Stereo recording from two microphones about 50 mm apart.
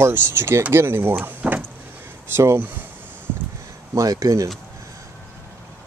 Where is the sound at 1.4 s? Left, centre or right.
Right.